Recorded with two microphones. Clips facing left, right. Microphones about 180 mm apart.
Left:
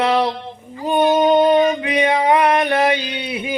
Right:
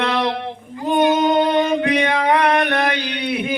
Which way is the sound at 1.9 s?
10° left (ahead or behind).